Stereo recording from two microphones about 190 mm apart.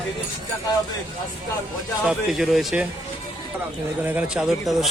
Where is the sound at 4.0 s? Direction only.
10° right (ahead or behind).